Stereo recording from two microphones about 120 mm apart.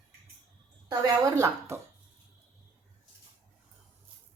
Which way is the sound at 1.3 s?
30° right (ahead or behind).